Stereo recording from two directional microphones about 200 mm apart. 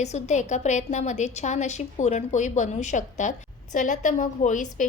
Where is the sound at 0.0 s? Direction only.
35° left (ahead or behind).